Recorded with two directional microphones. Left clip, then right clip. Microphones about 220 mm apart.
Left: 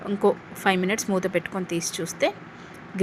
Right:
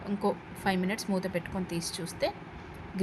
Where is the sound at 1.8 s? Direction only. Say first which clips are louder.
Left 7 dB; 20° right (ahead or behind).